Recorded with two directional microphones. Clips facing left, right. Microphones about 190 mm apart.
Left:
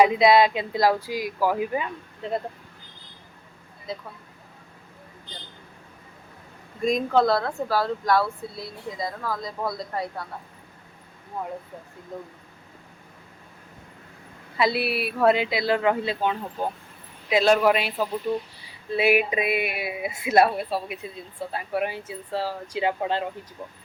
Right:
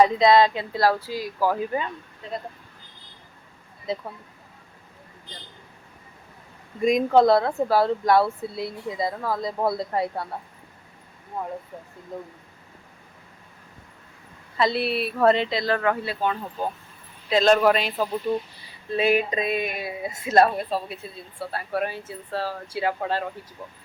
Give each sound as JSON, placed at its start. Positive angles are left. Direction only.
{"t": 0.0, "sound": "speech", "side_deg": 10}
{"t": 3.9, "sound": "speech", "side_deg": -25}
{"t": 7.1, "sound": "speech", "side_deg": -20}
{"t": 14.6, "sound": "speech", "side_deg": 5}